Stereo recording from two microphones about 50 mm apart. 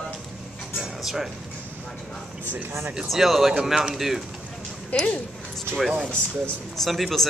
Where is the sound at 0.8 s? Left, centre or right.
Centre.